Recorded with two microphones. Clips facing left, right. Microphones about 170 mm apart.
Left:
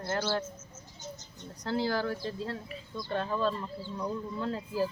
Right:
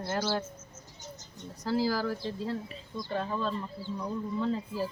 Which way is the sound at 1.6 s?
5° right (ahead or behind).